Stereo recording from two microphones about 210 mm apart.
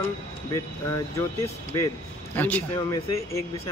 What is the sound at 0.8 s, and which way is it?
Speech, 15° left (ahead or behind).